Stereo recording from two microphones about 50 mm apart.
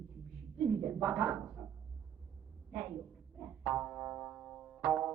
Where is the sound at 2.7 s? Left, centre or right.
Centre.